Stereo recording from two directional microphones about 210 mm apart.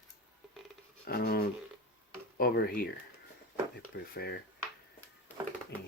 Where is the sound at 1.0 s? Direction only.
45° left (ahead or behind).